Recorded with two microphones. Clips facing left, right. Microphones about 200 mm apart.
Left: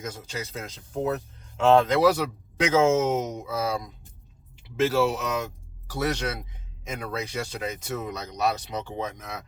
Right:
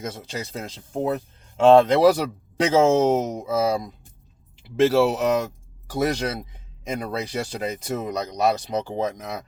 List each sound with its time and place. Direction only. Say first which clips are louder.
0.3 s speech: right 3 dB; 35° right (ahead or behind)